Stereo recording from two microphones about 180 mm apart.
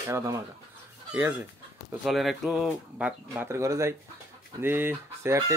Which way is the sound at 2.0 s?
Centre (ahead or behind).